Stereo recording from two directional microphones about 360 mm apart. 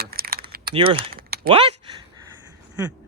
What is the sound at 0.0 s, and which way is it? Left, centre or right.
Keys jangling, right.